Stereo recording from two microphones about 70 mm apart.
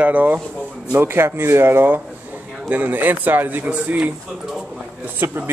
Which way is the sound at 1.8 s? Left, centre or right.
Right.